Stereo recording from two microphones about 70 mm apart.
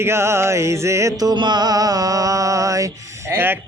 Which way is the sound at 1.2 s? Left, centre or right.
Right.